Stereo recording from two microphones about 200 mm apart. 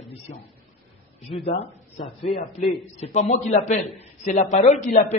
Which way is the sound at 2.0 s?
30° left (ahead or behind).